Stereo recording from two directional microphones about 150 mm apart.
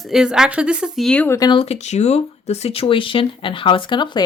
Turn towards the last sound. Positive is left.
turn(degrees=30)  # may be behind; listen again after turning